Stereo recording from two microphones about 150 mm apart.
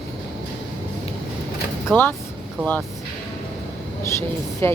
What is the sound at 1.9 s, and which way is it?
Speech, 10° left (ahead or behind).